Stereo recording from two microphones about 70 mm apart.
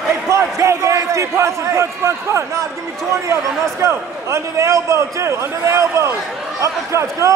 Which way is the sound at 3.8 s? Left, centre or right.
Right.